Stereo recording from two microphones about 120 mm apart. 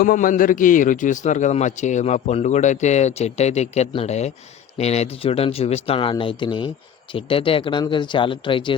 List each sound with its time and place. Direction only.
0.2 s a man's voice: 90° left; by 8.7 s 45° left (ahead or behind)